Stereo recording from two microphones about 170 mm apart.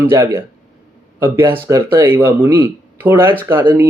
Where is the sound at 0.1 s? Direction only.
15° right (ahead or behind).